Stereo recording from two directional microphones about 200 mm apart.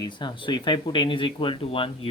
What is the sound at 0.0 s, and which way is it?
Speech, 20° left (ahead or behind).